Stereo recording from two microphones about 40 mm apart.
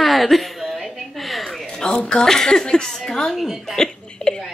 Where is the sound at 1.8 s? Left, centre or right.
Centre.